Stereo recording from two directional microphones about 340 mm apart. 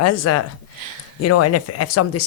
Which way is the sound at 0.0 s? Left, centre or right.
Left.